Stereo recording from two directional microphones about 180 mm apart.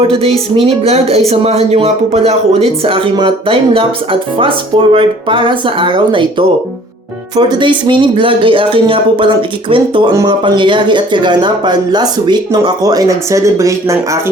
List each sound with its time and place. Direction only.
0.1 s speech: 30° right (ahead or behind)
7.3 s speech: 25° right (ahead or behind)